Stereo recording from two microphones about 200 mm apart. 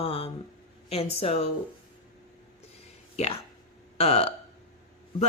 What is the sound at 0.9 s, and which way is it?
Speech, 30° left (ahead or behind).